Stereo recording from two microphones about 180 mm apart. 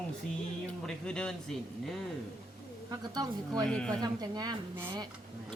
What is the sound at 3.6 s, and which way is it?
Speech, 5° left (ahead or behind).